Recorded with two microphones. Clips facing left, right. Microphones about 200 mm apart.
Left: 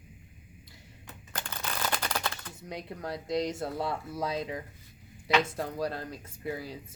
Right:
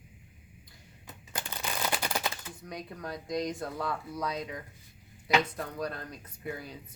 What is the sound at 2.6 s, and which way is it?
Speech, 25° left (ahead or behind).